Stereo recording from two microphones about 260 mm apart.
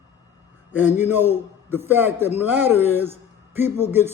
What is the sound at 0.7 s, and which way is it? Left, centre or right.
A man's voice, centre.